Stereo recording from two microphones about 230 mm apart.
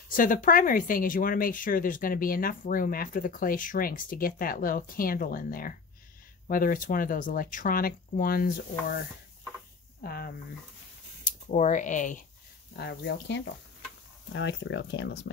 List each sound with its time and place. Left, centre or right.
0.1 s speech: left
10.0 s speech: left
11.2 s speech: left
12.7 s speech: left